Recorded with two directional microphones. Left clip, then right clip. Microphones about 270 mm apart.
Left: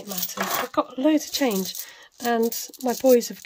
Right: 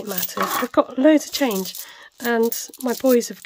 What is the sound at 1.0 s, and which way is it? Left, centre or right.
Speech, centre.